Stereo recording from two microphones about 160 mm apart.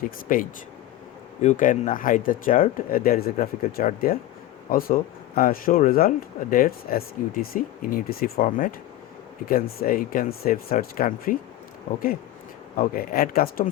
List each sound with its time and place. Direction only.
1.4 s speech: 50° left (ahead or behind)
12.7 s speech: 60° left (ahead or behind)